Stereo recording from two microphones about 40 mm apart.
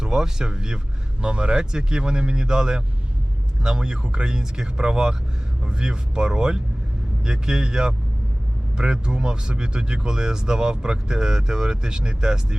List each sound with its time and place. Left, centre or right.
0.0 s speech: centre